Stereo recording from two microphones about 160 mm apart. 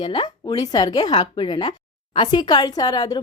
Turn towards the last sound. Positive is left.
turn(degrees=25)  # may be behind; listen again after turning